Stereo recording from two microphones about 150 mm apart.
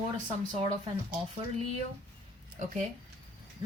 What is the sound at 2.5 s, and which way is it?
Speech, 50° right (ahead or behind).